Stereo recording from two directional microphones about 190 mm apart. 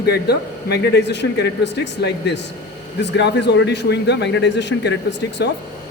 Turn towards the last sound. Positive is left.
turn(degrees=65)  # may be behind; listen again after turning